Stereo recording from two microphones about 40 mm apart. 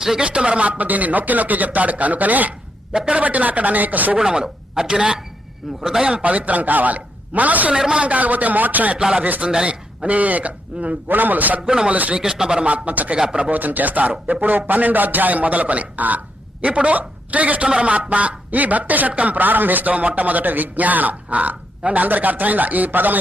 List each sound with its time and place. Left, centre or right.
0.2 s speech: right
4.2 s speech: centre
6.2 s speech: right
7.7 s speech: right
8.0 s speech: right
9.0 s speech: right
10.0 s speech: right
11.1 s a man's voice: right
11.6 s speech: centre
11.9 s speech: right
12.1 s speech: centre
12.6 s speech: right
13.1 s speech: right
13.5 s a man's voice: right